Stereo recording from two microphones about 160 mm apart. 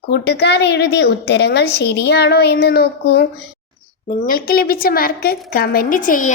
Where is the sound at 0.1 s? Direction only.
90° left.